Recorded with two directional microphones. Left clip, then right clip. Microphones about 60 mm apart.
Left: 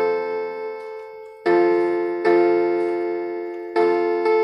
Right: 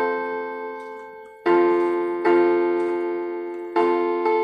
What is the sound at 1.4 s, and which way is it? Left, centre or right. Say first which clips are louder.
Music: left 1 dB; left.